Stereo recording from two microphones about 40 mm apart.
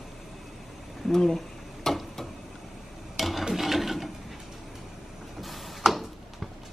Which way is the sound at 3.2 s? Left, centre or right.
Centre.